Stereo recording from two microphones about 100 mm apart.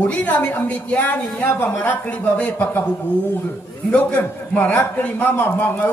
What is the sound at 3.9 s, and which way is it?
A man's voice, 15° left (ahead or behind).